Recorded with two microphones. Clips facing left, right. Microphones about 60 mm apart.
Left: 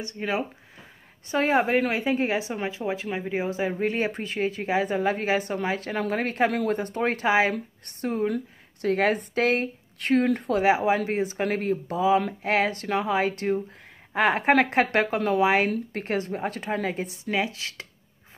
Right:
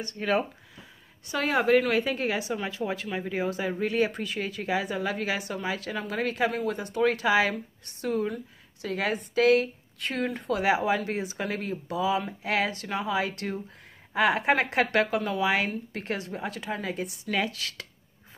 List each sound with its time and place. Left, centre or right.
0.0 s speech: centre
1.3 s a woman's voice: left
7.5 s a woman's voice: left
9.9 s speech: left
10.6 s a woman's voice: left